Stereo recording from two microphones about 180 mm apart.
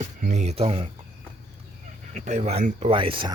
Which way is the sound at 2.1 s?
40° right (ahead or behind).